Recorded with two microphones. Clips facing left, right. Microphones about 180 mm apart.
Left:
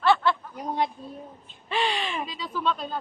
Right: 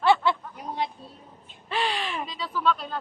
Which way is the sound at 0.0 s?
20° right (ahead or behind).